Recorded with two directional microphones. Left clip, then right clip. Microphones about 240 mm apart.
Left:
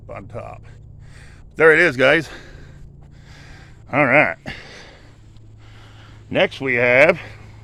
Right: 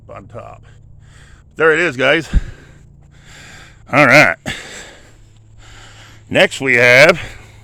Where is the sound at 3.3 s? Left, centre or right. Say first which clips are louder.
Right 7 dB; right.